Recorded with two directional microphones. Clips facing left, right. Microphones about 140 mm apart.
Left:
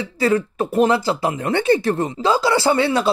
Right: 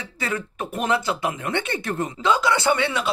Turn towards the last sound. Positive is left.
turn(degrees=35)  # may be behind; listen again after turning